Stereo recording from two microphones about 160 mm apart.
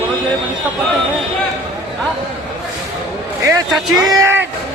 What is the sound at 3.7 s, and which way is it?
Speech, centre (ahead or behind).